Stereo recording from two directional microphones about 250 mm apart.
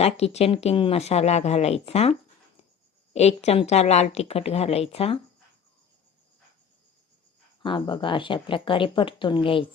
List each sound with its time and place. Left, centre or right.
0.0 s speech: left
7.6 s speech: centre